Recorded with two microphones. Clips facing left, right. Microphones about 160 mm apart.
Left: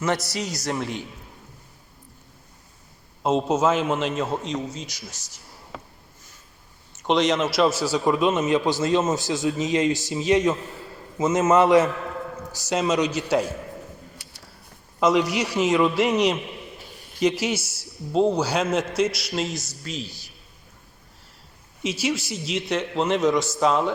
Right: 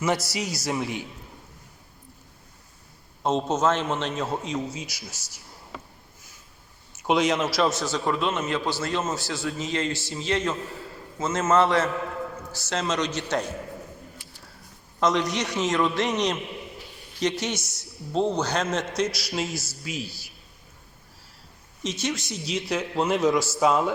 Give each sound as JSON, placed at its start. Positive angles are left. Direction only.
{"t": 0.0, "sound": "a man's voice", "side_deg": -5}
{"t": 3.2, "sound": "a man's voice", "side_deg": 5}
{"t": 6.9, "sound": "a man's voice", "side_deg": -5}
{"t": 15.0, "sound": "a man's voice", "side_deg": 10}
{"t": 21.8, "sound": "a man's voice", "side_deg": 5}